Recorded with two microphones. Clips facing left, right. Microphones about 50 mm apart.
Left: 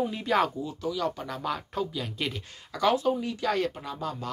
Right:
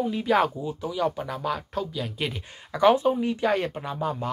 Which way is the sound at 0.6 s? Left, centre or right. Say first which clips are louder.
Right 3 dB; right.